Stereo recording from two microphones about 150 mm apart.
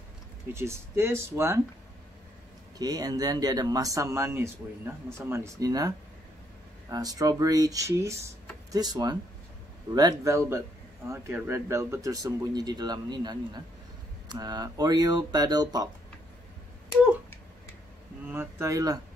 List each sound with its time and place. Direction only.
0.5 s speech: 15° right (ahead or behind)
2.8 s speech: 25° right (ahead or behind)
18.3 s speech: 15° right (ahead or behind)